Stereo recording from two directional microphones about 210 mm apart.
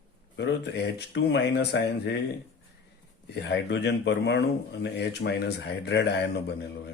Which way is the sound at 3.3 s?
50° left (ahead or behind).